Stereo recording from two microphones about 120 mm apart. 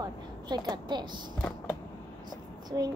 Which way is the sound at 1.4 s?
10° left (ahead or behind).